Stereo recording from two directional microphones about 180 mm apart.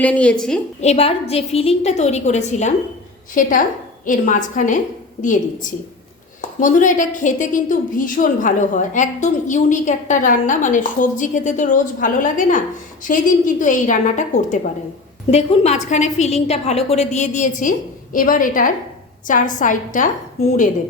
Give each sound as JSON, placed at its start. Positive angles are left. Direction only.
{"t": 0.0, "sound": "a woman's voice", "side_deg": 5}
{"t": 0.8, "sound": "a woman's voice", "side_deg": 35}